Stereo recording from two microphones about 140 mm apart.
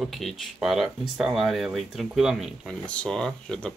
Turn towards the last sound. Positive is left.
turn(degrees=5)  # may be behind; listen again after turning